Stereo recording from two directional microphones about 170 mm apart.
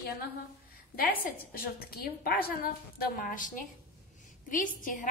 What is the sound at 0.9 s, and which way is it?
A woman's voice, 60° left (ahead or behind).